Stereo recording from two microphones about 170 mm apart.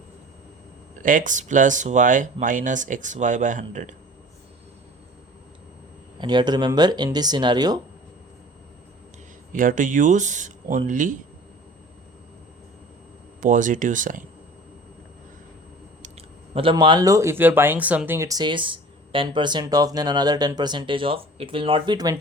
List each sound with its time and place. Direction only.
1.0 s speech: 50° right (ahead or behind)
6.1 s speech: 25° right (ahead or behind)
9.5 s speech: 50° right (ahead or behind)
13.4 s speech: 50° right (ahead or behind)
16.0 s speech: 35° right (ahead or behind)